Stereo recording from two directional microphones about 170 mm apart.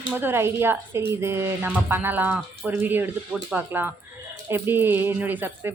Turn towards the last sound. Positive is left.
turn(degrees=-10)  # may be behind; listen again after turning